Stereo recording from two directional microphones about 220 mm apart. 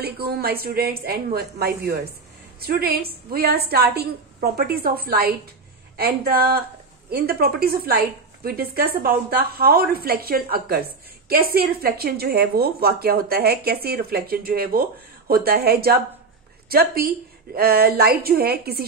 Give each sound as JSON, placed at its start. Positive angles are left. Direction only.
{"t": 0.0, "sound": "speech", "side_deg": -45}